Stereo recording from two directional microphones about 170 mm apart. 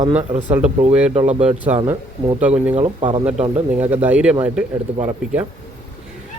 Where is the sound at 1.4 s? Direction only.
5° right (ahead or behind).